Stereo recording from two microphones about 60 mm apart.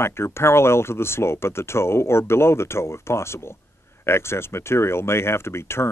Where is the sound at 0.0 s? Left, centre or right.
Left.